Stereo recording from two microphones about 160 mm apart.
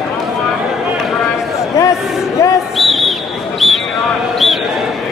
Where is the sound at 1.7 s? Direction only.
20° left (ahead or behind).